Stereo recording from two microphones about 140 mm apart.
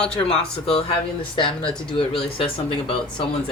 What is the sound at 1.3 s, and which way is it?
Speech, 35° left (ahead or behind).